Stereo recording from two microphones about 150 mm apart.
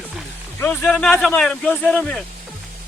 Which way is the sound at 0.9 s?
Centre (ahead or behind).